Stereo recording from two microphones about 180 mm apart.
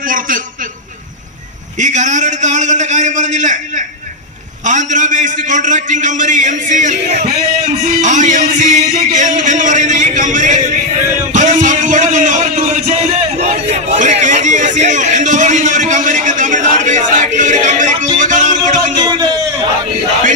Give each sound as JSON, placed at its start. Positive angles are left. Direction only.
{"t": 0.1, "sound": "a man's voice", "side_deg": -50}
{"t": 1.8, "sound": "a man's voice", "side_deg": -40}
{"t": 11.3, "sound": "music", "side_deg": -45}
{"t": 19.0, "sound": "a sound", "side_deg": -20}